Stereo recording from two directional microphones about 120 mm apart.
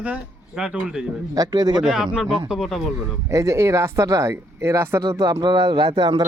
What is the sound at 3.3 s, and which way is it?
Speech, 25° right (ahead or behind).